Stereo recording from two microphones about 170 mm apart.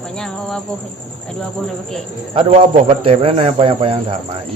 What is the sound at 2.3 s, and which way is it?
Speech, 35° right (ahead or behind).